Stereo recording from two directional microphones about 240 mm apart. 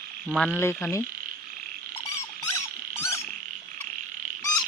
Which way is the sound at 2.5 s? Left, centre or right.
Centre.